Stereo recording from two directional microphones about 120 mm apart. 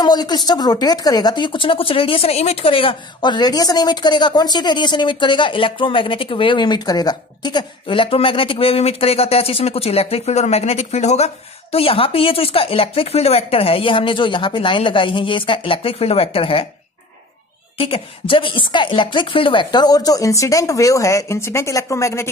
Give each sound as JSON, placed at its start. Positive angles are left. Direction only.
{"t": 0.0, "sound": "speech", "side_deg": 35}
{"t": 17.7, "sound": "speech", "side_deg": 50}